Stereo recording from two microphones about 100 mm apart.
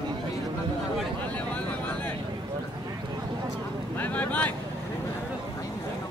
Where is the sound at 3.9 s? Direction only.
15° left (ahead or behind).